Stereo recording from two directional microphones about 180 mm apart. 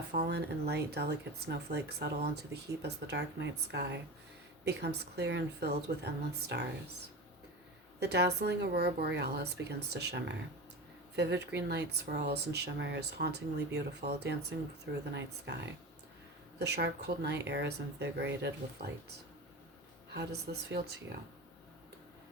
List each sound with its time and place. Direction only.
0.1 s speech: 65° right (ahead or behind)
7.9 s speech: 70° right (ahead or behind)
20.1 s speech: 65° right (ahead or behind)